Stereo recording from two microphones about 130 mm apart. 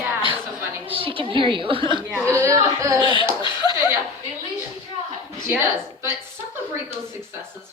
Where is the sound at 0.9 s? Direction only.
45° right (ahead or behind).